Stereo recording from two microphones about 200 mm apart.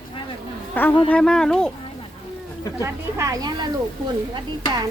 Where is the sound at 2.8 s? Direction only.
15° right (ahead or behind).